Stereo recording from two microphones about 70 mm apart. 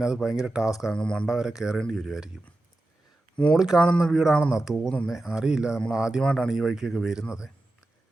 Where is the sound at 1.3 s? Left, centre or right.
Centre.